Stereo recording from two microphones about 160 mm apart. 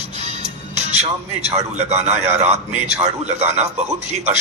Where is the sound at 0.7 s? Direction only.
45° right (ahead or behind).